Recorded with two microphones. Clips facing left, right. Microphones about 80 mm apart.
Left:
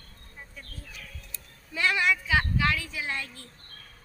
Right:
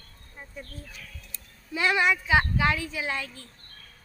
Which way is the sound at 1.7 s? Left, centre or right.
Right.